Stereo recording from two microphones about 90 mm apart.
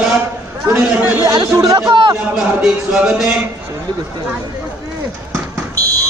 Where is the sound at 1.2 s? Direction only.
45° right (ahead or behind).